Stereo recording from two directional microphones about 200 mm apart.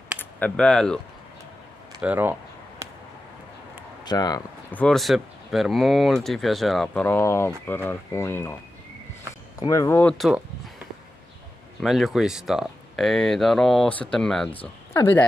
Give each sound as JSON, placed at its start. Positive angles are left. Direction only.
{"t": 0.2, "sound": "speech", "side_deg": 5}
{"t": 2.0, "sound": "speech", "side_deg": -10}
{"t": 4.0, "sound": "speech", "side_deg": 20}
{"t": 4.6, "sound": "speech", "side_deg": 5}
{"t": 9.6, "sound": "speech", "side_deg": 15}
{"t": 11.8, "sound": "speech", "side_deg": 0}